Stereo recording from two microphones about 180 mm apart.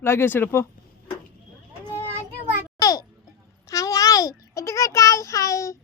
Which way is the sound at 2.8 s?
20° left (ahead or behind).